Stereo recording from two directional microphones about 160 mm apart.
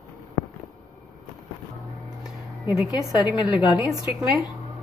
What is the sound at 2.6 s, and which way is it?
Speech, centre (ahead or behind).